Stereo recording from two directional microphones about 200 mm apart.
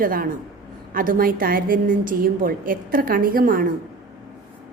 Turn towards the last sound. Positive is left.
turn(degrees=-45)  # may be behind; listen again after turning